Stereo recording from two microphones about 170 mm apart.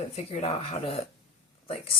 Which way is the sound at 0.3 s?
35° left (ahead or behind).